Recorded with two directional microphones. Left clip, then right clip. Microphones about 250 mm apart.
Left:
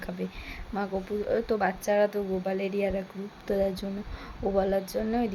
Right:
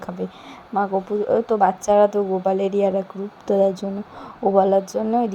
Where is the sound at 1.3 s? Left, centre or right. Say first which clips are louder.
Right 10 dB; centre.